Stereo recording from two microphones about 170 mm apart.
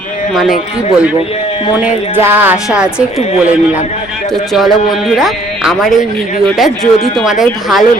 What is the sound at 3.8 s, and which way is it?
Speech, 40° left (ahead or behind).